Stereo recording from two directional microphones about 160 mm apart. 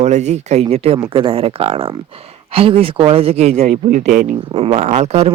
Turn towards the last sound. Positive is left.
turn(degrees=-45)  # may be behind; listen again after turning